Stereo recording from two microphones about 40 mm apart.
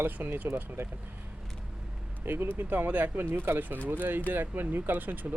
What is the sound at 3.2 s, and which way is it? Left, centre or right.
Speech, right.